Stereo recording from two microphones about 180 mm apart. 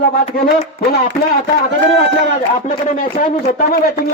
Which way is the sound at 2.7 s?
40° left (ahead or behind).